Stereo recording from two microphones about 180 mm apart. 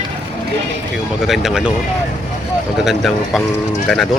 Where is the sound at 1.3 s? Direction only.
Centre (ahead or behind).